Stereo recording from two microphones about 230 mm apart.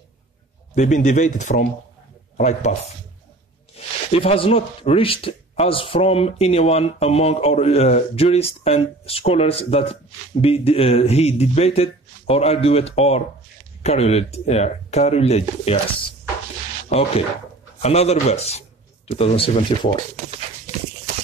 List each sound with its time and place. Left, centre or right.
0.7 s speech: left
3.7 s speech: left
16.9 s speech: left